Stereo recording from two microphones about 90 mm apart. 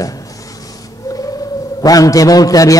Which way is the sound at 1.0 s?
40° left (ahead or behind).